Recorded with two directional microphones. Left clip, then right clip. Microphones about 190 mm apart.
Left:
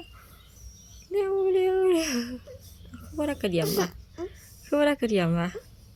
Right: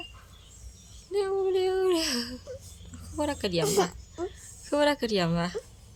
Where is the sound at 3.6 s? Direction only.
20° right (ahead or behind).